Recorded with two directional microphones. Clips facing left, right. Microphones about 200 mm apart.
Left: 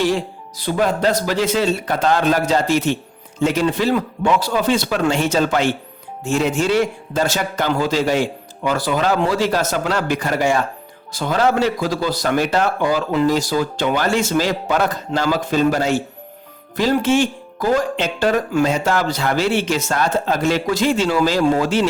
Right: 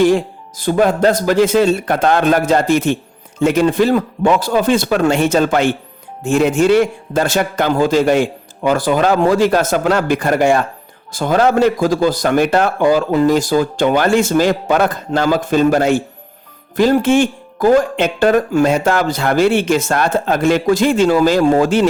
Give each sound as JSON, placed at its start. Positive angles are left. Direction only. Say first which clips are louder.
{"t": 0.0, "sound": "speech", "louder": "right 7 dB", "side_deg": -50}